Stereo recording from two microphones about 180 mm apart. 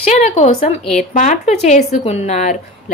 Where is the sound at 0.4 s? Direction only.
40° left (ahead or behind).